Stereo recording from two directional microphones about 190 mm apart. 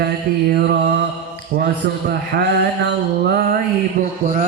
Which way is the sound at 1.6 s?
55° right (ahead or behind).